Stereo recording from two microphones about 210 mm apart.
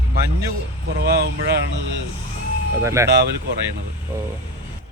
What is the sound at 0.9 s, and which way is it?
Speech, 50° right (ahead or behind).